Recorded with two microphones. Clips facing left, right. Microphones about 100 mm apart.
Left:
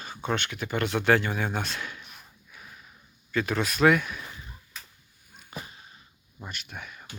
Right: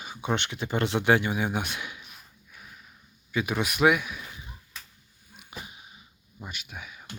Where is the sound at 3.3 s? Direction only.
10° right (ahead or behind).